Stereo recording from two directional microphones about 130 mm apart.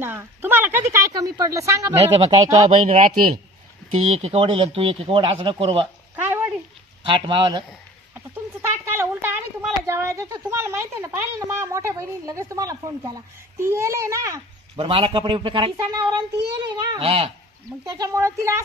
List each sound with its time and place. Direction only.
0.0 s speech: 15° right (ahead or behind)
2.1 s speech: 50° right (ahead or behind)
2.7 s speech: 65° right (ahead or behind)
4.1 s speech: 55° right (ahead or behind)
6.2 s a sound: 15° right (ahead or behind)
7.0 s a child's voice: 40° right (ahead or behind)
8.9 s a child's voice: 15° right (ahead or behind)
14.8 s speech: 45° right (ahead or behind)
15.7 s a child's voice: 25° right (ahead or behind)
17.0 s speech: 45° right (ahead or behind)
17.9 s a child's voice: 25° right (ahead or behind)